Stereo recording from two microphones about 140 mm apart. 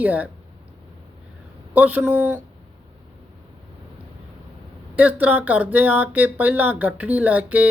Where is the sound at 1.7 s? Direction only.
10° right (ahead or behind).